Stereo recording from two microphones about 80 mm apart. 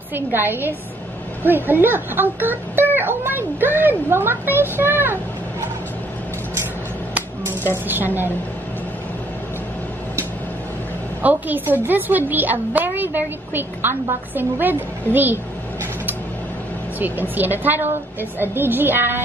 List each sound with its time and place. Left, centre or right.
0.1 s speech: right
7.9 s speech: right
11.2 s speech: right
17.0 s speech: right